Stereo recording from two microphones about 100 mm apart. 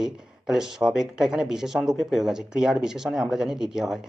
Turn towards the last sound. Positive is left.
turn(degrees=-5)  # may be behind; listen again after turning